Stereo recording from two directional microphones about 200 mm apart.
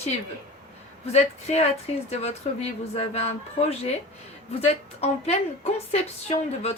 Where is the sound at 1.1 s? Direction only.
35° left (ahead or behind).